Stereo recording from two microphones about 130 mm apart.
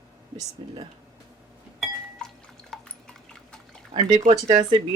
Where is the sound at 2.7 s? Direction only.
5° left (ahead or behind).